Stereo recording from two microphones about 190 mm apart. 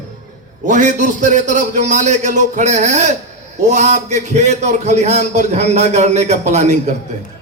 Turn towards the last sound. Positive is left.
turn(degrees=-40)  # may be behind; listen again after turning